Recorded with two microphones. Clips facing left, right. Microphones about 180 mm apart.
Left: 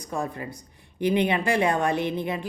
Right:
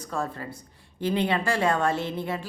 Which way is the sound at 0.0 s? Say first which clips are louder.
Left 1 dB; 20° left (ahead or behind).